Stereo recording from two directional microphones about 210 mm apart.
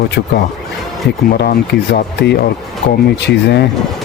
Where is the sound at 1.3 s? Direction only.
50° left (ahead or behind).